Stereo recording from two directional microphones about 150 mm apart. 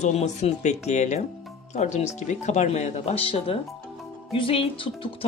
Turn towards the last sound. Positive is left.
turn(degrees=35)  # may be behind; listen again after turning